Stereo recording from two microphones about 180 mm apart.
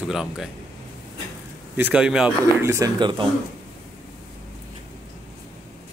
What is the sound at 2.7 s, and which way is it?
Speech, 20° right (ahead or behind).